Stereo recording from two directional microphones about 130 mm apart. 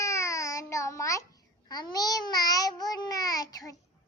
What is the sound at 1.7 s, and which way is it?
Babbling, 30° left (ahead or behind).